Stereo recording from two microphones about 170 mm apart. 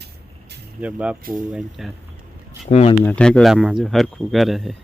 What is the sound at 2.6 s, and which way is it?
Speech, 40° left (ahead or behind).